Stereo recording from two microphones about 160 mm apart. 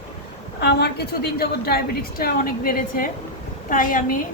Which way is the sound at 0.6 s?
90° left.